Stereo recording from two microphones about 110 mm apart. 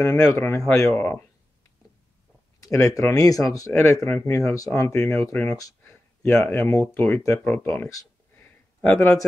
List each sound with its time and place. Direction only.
0.0 s speech: 30° left (ahead or behind)
2.6 s speech: 30° left (ahead or behind)
5.6 s a sound: 30° left (ahead or behind)
6.7 s speech: 25° left (ahead or behind)
7.4 s speech: 15° left (ahead or behind)